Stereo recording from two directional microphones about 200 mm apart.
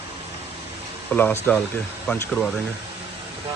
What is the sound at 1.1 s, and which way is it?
Speech, 10° left (ahead or behind).